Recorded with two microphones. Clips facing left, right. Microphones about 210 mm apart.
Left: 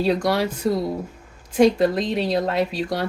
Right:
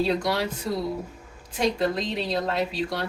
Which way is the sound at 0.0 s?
50° left (ahead or behind).